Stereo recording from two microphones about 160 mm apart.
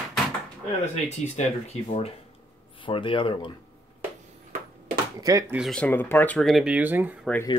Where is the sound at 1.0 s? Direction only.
45° left (ahead or behind).